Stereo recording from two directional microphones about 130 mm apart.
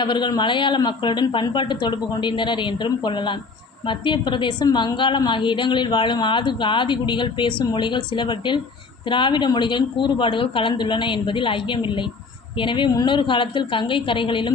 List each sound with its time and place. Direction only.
0.0 s a woman's voice: 35° left (ahead or behind)